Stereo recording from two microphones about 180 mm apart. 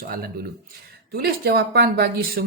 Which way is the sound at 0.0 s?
55° right (ahead or behind).